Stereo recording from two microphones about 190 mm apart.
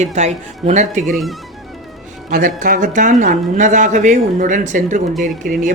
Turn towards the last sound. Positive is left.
turn(degrees=-45)  # may be behind; listen again after turning